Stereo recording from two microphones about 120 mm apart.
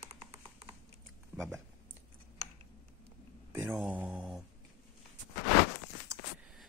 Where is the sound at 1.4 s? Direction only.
Centre (ahead or behind).